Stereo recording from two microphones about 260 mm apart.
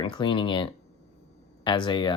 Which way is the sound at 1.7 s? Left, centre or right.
Centre.